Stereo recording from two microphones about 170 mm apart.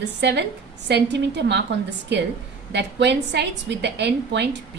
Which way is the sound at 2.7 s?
90° right.